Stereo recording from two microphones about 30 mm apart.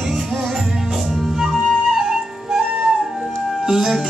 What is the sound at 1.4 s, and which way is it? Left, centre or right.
Flute, centre.